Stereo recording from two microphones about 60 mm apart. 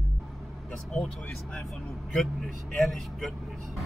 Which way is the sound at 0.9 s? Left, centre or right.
Centre.